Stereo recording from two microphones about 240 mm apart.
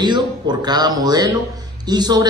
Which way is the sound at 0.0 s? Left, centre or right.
Centre.